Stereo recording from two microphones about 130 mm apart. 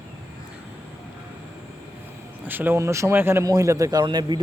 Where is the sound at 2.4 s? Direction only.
15° right (ahead or behind).